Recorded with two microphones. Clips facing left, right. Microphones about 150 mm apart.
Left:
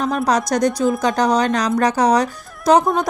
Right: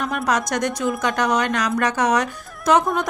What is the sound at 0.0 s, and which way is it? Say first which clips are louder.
A woman's voice: left 4 dB; 35° left (ahead or behind).